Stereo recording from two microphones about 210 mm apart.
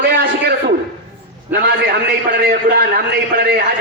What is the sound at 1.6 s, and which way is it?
A man's voice, 50° right (ahead or behind).